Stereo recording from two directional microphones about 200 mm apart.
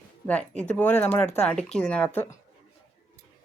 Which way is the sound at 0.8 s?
10° left (ahead or behind).